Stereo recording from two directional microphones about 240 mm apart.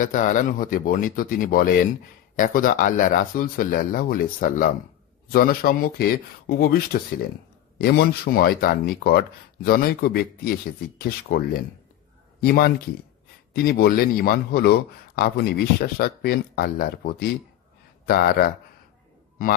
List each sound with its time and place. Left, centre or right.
0.0 s speech: left